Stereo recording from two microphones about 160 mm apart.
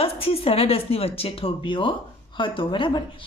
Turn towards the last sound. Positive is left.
turn(degrees=30)  # may be behind; listen again after turning